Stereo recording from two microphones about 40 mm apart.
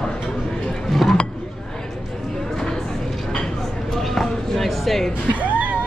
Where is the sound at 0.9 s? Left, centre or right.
Centre.